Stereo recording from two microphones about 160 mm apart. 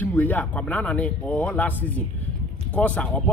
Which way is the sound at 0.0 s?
10° left (ahead or behind).